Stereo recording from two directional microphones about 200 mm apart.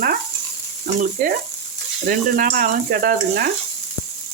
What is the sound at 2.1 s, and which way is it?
Speech, 45° right (ahead or behind).